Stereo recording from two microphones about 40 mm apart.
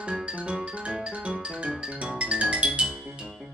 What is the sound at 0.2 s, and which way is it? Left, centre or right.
Music, right.